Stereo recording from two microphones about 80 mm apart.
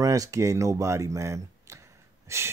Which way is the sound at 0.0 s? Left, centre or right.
Right.